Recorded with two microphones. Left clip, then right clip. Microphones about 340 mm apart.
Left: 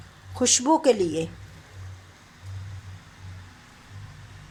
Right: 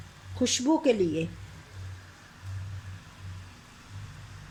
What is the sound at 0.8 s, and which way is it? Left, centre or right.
Speech, centre.